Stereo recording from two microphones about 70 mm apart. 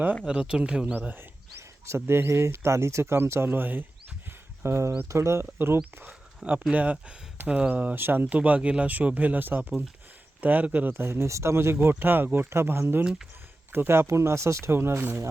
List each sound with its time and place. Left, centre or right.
0.3 s speech: centre
1.0 s a sound: right
2.0 s speech: right
4.3 s a sound: right
5.0 s speech: right
6.4 s speech: centre; by 15.2 s right